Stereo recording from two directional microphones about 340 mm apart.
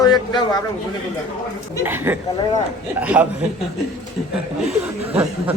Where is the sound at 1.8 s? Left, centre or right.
Centre.